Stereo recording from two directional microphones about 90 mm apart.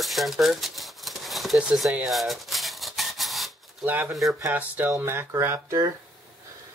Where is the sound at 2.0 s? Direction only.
Centre (ahead or behind).